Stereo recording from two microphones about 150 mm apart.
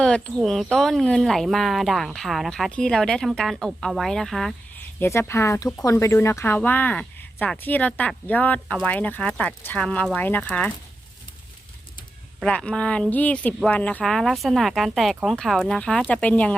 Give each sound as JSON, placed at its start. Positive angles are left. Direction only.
{"t": 0.0, "sound": "speech", "side_deg": 5}
{"t": 4.9, "sound": "speech", "side_deg": 15}
{"t": 8.6, "sound": "speech", "side_deg": 0}
{"t": 8.9, "sound": "speech", "side_deg": 10}
{"t": 12.4, "sound": "speech", "side_deg": 5}